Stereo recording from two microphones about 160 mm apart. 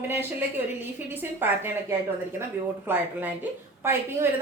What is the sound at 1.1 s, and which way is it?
Speech, 10° right (ahead or behind).